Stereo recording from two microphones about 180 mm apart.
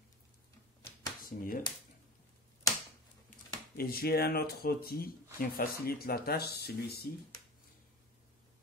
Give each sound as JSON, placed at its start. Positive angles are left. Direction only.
{"t": 1.2, "sound": "speech", "side_deg": 50}
{"t": 3.3, "sound": "speech", "side_deg": 55}